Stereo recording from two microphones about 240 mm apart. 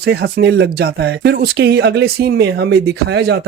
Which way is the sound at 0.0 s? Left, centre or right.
Right.